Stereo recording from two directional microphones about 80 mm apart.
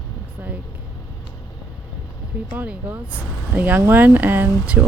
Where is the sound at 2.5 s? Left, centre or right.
Right.